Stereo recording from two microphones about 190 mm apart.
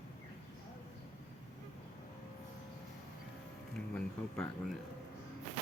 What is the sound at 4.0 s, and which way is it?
Speech, 5° left (ahead or behind).